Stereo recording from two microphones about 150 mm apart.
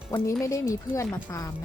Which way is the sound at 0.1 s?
20° left (ahead or behind).